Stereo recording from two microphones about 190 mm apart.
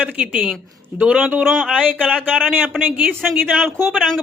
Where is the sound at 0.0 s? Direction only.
5° right (ahead or behind).